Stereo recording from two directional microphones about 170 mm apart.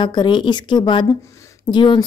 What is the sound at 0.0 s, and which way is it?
Speech, 25° left (ahead or behind).